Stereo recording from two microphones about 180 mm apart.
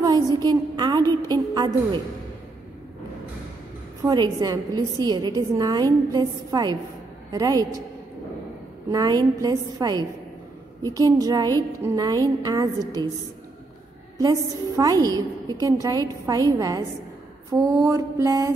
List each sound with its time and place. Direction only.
0.0 s a woman's voice: 20° right (ahead or behind)
4.0 s a woman's voice: 20° right (ahead or behind)
8.9 s a woman's voice: 20° right (ahead or behind)
14.1 s a woman's voice: 20° right (ahead or behind)
17.5 s mantra: 15° right (ahead or behind)